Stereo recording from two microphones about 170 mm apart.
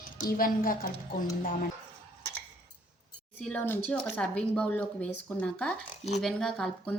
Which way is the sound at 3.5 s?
10° left (ahead or behind).